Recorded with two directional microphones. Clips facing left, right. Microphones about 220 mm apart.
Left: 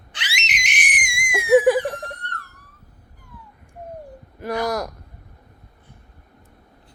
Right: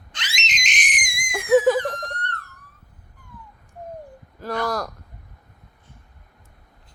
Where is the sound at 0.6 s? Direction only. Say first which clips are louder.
Left 1 dB; 10° left (ahead or behind).